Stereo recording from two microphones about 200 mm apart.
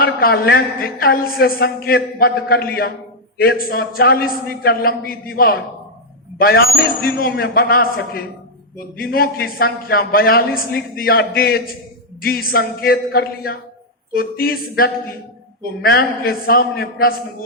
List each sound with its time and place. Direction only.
0.0 s a woman's voice: 50° left (ahead or behind)
7.0 s a woman's voice: 50° left (ahead or behind)